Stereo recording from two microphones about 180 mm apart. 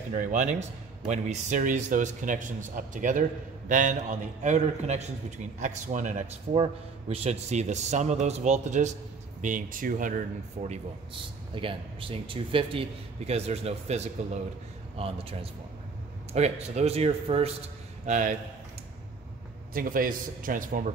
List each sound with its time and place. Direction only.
0.1 s speech: 45° right (ahead or behind)
6.5 s a man's voice: 30° right (ahead or behind); by 10.2 s 50° right (ahead or behind)
10.6 s a man's voice: 30° right (ahead or behind)
16.3 s a man's voice: 35° right (ahead or behind)
19.7 s speech: 50° right (ahead or behind)